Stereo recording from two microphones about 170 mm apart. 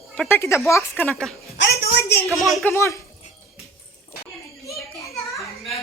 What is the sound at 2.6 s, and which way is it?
Speech, 15° left (ahead or behind).